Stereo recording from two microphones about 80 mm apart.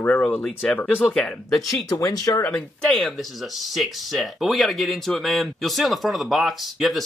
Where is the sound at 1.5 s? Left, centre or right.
Left.